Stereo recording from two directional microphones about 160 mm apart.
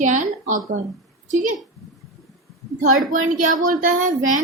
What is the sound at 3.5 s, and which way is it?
Speech, 55° right (ahead or behind).